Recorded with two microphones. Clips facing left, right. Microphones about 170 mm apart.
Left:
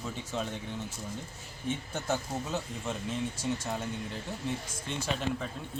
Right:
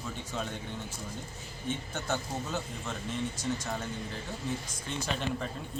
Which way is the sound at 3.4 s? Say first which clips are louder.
Left 1 dB; 30° left (ahead or behind).